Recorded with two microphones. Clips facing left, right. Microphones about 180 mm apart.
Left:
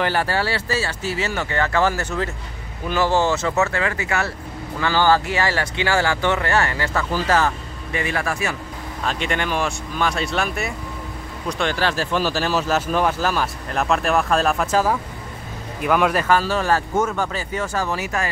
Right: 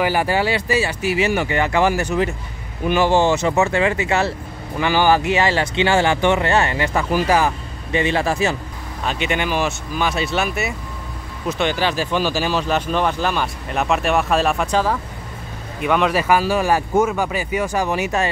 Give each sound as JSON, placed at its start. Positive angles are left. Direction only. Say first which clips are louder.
{"t": 0.0, "sound": "speech", "louder": "right 3 dB", "side_deg": -15}
{"t": 7.9, "sound": "speech", "louder": "right 5 dB", "side_deg": -25}
{"t": 9.0, "sound": "speech", "louder": "right 2 dB", "side_deg": -5}